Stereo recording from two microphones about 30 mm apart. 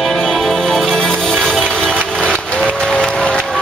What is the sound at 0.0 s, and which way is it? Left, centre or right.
Music, centre.